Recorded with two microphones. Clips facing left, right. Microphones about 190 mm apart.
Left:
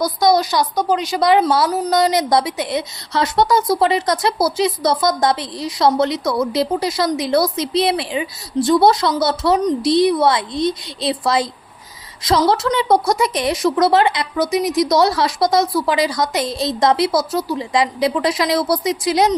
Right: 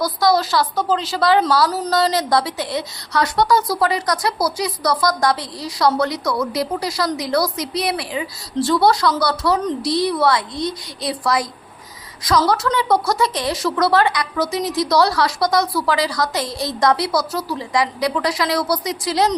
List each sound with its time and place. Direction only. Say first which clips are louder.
0.0 s a woman's voice: left 2 dB; 20° left (ahead or behind)